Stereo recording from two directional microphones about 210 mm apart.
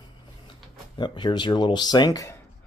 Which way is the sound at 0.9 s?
20° left (ahead or behind).